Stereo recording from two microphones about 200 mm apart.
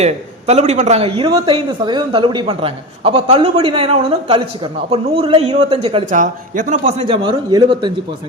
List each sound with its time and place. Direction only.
0.0 s a man's voice: 35° right (ahead or behind)
7.0 s a man's voice: 25° right (ahead or behind)